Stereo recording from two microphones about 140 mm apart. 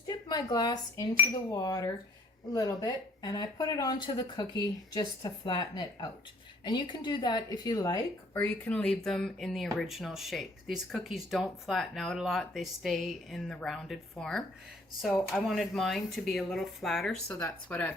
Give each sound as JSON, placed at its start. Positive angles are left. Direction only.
{"t": 0.1, "sound": "speech", "side_deg": 30}
{"t": 15.4, "sound": "speech", "side_deg": 0}
{"t": 17.2, "sound": "speech", "side_deg": 25}
{"t": 17.7, "sound": "speech", "side_deg": 10}